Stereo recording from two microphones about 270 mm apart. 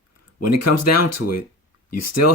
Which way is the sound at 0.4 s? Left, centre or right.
Left.